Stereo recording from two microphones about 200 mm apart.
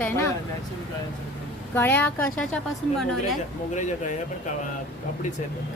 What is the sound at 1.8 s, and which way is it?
A woman's voice, 10° left (ahead or behind).